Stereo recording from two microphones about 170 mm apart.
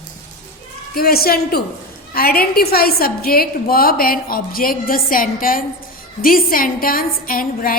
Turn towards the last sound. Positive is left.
turn(degrees=55)  # may be behind; listen again after turning